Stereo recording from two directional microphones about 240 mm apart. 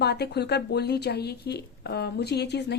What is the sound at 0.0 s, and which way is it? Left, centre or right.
A woman's voice, left.